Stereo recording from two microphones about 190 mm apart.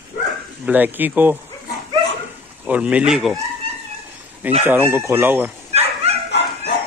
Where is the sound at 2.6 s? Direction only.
5° right (ahead or behind).